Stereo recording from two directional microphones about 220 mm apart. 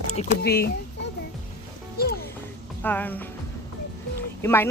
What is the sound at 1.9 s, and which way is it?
Music, 45° left (ahead or behind).